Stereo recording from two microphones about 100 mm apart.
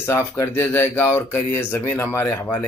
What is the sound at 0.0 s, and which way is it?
A man's voice, 25° left (ahead or behind).